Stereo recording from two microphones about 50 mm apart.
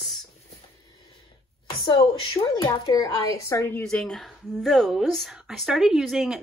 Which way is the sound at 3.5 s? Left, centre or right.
Left.